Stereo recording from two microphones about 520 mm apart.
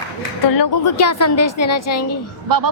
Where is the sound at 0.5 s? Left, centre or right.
Left.